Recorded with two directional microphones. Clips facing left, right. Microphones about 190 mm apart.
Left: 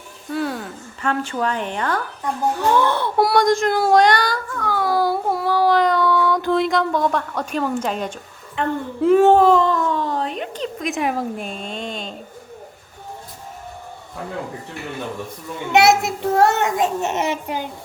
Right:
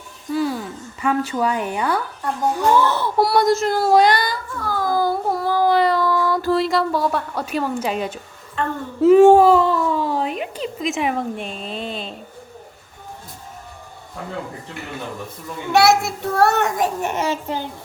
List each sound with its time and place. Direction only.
0.3 s a sound: centre (ahead or behind)
2.6 s speech: 10° right (ahead or behind)
5.5 s a sound: 10° right (ahead or behind)
8.6 s speech: 15° left (ahead or behind)
9.0 s a child's voice: 10° right (ahead or behind)
15.7 s a child's voice: 20° left (ahead or behind)